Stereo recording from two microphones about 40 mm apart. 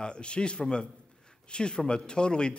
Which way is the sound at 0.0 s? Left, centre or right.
Left.